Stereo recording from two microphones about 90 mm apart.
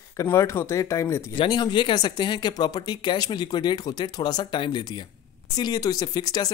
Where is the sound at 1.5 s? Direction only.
55° left (ahead or behind).